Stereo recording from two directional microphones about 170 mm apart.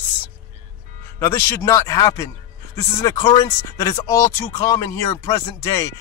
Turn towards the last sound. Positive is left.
turn(degrees=20)  # may be behind; listen again after turning